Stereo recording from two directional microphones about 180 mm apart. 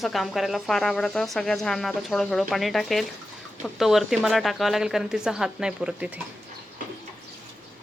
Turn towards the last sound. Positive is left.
turn(degrees=-5)  # may be behind; listen again after turning